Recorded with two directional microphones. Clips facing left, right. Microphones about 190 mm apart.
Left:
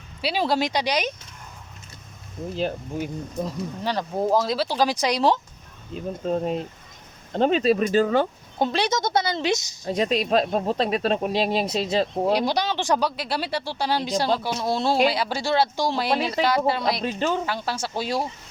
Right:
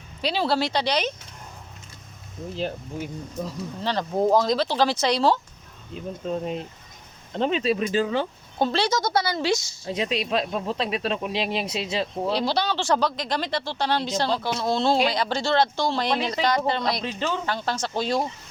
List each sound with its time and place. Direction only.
0.2 s speech: 10° left (ahead or behind)
2.6 s speech: 50° left (ahead or behind)
3.8 s speech: 5° left (ahead or behind)
6.2 s speech: 40° left (ahead or behind)
8.5 s a woman's voice: 15° left (ahead or behind)
9.8 s speech: 45° left (ahead or behind)
12.3 s speech: 15° left (ahead or behind)
17.0 s speech: 45° left (ahead or behind)
17.4 s speech: 10° left (ahead or behind)